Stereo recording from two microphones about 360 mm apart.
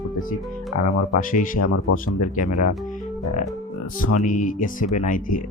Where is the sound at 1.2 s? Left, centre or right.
Left.